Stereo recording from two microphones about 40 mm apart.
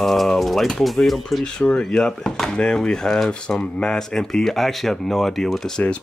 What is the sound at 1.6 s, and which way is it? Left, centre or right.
Speech, left.